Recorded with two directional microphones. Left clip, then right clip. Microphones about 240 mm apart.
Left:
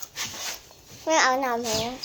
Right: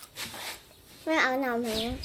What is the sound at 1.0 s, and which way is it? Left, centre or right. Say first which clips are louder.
Speech: left 5 dB; right.